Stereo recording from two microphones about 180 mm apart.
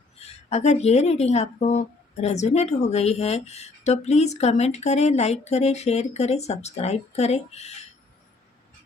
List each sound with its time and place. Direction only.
0.2 s a woman's voice: 40° left (ahead or behind)